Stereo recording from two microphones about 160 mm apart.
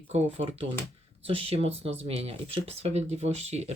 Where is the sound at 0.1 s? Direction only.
40° right (ahead or behind).